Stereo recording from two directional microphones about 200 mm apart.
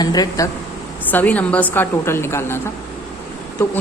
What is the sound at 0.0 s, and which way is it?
Speech, 20° left (ahead or behind).